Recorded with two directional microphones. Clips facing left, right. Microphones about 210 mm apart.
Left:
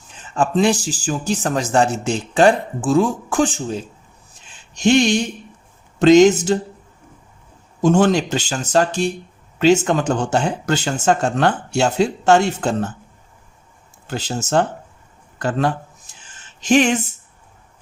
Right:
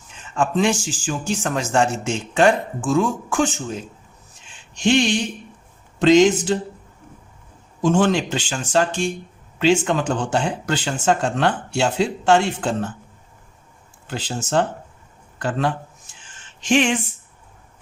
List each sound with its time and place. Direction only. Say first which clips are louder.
0.1 s speech: left 2 dB; 35° left (ahead or behind)
4.4 s a sound: left 3 dB; 40° left (ahead or behind)
6.0 s speech: left 3 dB; 45° left (ahead or behind)
7.8 s speech: left 3 dB; 40° left (ahead or behind)
14.1 s speech: left 3 dB; 40° left (ahead or behind)
15.4 s a sound: left 3 dB; 40° left (ahead or behind)